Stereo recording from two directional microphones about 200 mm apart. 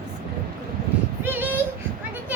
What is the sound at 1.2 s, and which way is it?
Child singing, 10° right (ahead or behind).